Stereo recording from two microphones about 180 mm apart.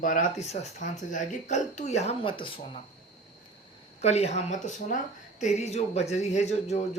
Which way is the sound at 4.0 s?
35° left (ahead or behind).